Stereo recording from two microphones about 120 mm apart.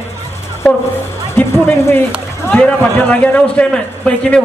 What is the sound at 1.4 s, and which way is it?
A man's voice, 20° left (ahead or behind).